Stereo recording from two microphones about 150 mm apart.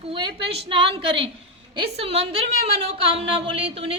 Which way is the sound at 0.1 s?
35° right (ahead or behind).